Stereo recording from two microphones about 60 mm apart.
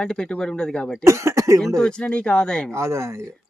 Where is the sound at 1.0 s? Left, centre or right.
Right.